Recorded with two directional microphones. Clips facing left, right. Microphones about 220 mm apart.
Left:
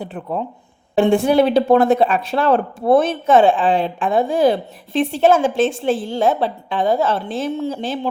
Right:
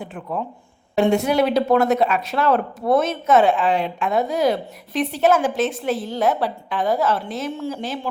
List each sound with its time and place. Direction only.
0.0 s speech: 35° left (ahead or behind)